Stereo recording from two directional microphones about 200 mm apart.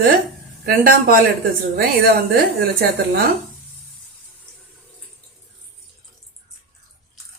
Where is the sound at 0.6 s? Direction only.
45° right (ahead or behind).